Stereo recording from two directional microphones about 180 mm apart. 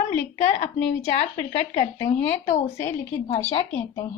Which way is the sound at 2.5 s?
40° left (ahead or behind).